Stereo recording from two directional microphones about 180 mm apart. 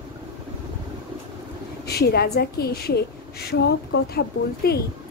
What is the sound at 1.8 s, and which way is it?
A woman's voice, 60° left (ahead or behind).